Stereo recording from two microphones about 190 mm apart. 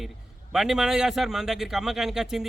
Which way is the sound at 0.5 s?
Centre (ahead or behind).